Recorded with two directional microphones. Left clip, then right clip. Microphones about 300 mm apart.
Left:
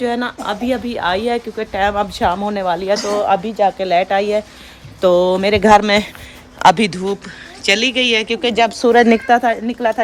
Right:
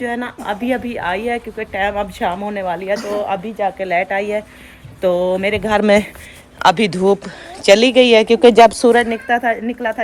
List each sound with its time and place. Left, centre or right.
0.0 s speech: centre
5.8 s speech: centre
6.6 s speech: centre